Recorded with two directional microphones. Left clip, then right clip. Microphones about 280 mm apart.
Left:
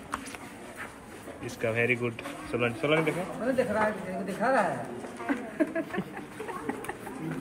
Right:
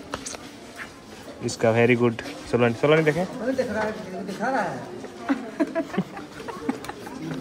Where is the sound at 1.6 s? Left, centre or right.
Right.